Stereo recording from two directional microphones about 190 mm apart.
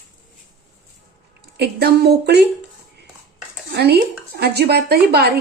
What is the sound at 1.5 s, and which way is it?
Speech, 60° right (ahead or behind).